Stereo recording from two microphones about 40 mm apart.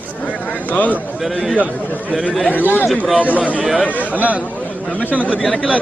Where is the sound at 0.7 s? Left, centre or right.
Left.